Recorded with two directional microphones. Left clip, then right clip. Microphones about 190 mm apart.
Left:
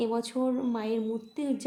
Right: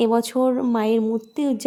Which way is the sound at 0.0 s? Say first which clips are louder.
Right 10 dB; 40° right (ahead or behind).